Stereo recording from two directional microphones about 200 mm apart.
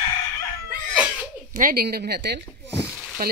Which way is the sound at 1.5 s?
45° right (ahead or behind).